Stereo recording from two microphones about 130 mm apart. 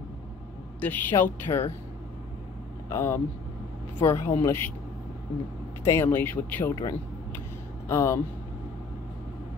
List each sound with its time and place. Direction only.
0.7 s speech: 15° left (ahead or behind)
2.9 s speech: 20° left (ahead or behind)
5.9 s speech: 20° left (ahead or behind)
7.9 s speech: 20° left (ahead or behind)